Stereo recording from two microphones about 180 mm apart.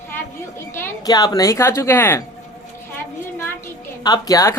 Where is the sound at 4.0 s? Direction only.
20° left (ahead or behind).